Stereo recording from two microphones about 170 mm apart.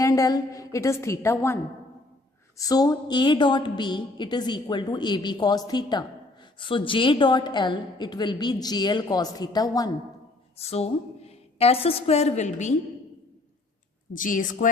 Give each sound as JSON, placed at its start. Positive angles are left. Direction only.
{"t": 0.0, "sound": "a woman's voice", "side_deg": 20}
{"t": 2.6, "sound": "a woman's voice", "side_deg": 20}
{"t": 10.6, "sound": "a woman's voice", "side_deg": 35}
{"t": 14.1, "sound": "a woman's voice", "side_deg": 50}